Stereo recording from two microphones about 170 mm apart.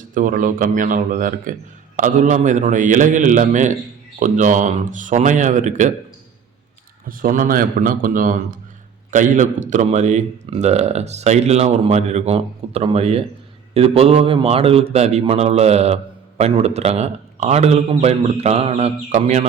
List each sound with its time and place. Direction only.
0.1 s a man's voice: 50° right (ahead or behind)
7.1 s a man's voice: 55° right (ahead or behind)